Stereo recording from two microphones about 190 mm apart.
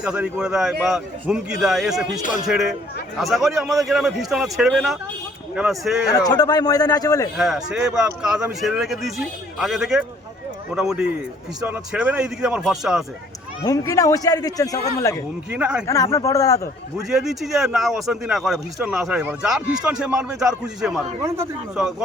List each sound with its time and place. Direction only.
0.0 s speech: 5° right (ahead or behind)
6.1 s speech: 20° left (ahead or behind)
7.3 s speech: centre (ahead or behind)
13.7 s a man's voice: 20° left (ahead or behind)
15.5 s speech: 5° right (ahead or behind)
16.1 s a man's voice: 15° left (ahead or behind)
17.1 s speech: centre (ahead or behind)
21.2 s a man's voice: 15° right (ahead or behind)
21.8 s speech: 5° right (ahead or behind)